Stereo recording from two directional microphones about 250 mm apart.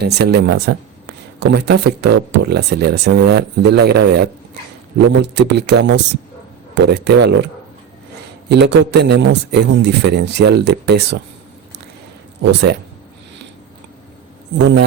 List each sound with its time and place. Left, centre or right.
0.0 s a man's voice: right
12.4 s a man's voice: right